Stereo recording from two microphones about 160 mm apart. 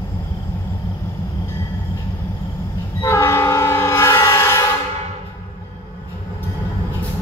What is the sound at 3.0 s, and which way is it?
Train, 15° left (ahead or behind).